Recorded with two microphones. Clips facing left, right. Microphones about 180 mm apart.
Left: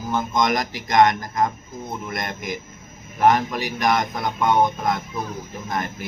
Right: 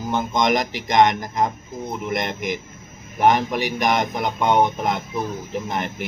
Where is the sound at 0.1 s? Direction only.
20° right (ahead or behind).